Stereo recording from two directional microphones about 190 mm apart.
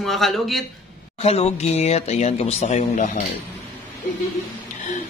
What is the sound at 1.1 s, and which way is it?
Speech, 35° left (ahead or behind).